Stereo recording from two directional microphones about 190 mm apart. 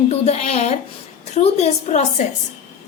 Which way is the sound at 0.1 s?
35° left (ahead or behind).